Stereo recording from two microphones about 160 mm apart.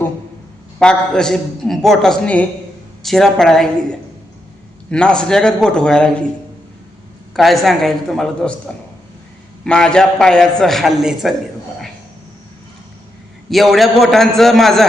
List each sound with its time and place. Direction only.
0.8 s a man's voice: 5° left (ahead or behind)
4.9 s a man's voice: 5° left (ahead or behind)
7.3 s a man's voice: centre (ahead or behind)
13.5 s a man's voice: centre (ahead or behind)